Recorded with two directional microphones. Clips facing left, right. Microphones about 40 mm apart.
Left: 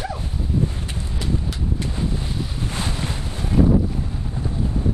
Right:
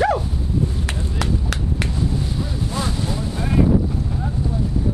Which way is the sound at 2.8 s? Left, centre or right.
Left.